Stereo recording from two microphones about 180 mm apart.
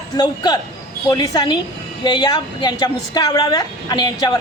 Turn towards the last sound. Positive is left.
turn(degrees=20)  # may be behind; listen again after turning